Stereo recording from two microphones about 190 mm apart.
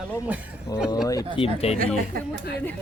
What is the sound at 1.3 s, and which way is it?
Speech, 30° left (ahead or behind).